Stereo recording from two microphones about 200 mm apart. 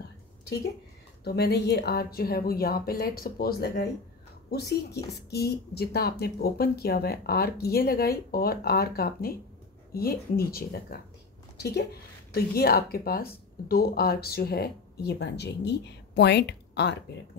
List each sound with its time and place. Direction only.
1.2 s a woman's voice: 55° left (ahead or behind)